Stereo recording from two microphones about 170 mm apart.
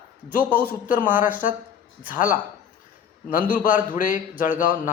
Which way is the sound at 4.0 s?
50° left (ahead or behind).